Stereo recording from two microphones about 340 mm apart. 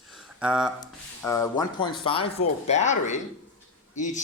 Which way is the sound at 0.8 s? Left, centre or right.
Centre.